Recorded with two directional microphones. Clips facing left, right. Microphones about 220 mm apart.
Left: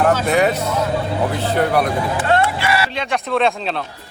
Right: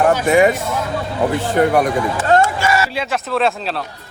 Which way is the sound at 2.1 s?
45° right (ahead or behind).